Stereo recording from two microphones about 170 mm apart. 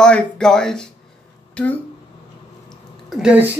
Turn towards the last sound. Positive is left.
turn(degrees=-10)  # may be behind; listen again after turning